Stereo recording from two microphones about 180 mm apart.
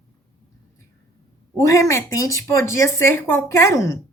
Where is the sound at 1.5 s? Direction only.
15° left (ahead or behind).